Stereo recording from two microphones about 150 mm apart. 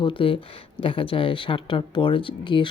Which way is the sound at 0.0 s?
35° left (ahead or behind).